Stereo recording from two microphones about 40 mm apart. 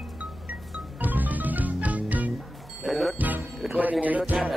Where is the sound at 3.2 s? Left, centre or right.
Right.